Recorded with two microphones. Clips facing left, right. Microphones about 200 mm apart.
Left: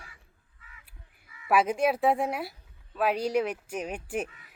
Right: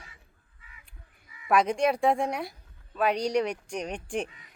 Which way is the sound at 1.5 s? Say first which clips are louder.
Even; 5° left (ahead or behind).